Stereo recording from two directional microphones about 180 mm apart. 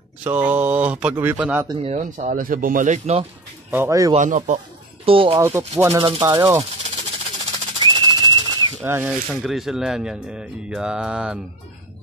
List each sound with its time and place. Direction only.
0.3 s speech: 10° right (ahead or behind)
1.9 s speech: 40° right (ahead or behind)
3.7 s speech: 15° right (ahead or behind)
4.1 s speech: 45° right (ahead or behind)
5.0 s speech: 30° right (ahead or behind)
5.3 s speech: 15° right (ahead or behind)
5.9 s speech: 25° right (ahead or behind)
7.3 s a sound: 25° right (ahead or behind)
8.8 s speech: 10° right (ahead or behind)
9.3 s speech: centre (ahead or behind)